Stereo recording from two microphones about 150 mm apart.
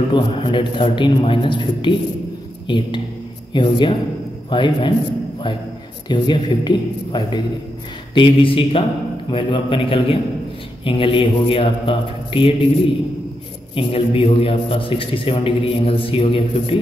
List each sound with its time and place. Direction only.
0.1 s a man's voice: 35° left (ahead or behind)
3.5 s a man's voice: 30° left (ahead or behind)
6.0 s a woman's voice: 30° left (ahead or behind)
13.7 s a man's voice: 35° left (ahead or behind)